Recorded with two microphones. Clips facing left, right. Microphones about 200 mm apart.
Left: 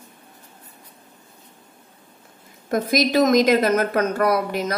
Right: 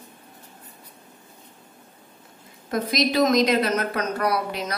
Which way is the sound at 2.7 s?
50° left (ahead or behind).